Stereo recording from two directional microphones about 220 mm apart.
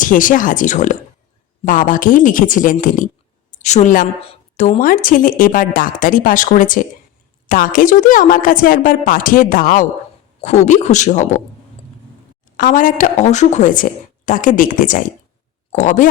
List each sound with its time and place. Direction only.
0.0 s a woman's voice: 35° left (ahead or behind)
12.5 s a woman's voice: 35° left (ahead or behind)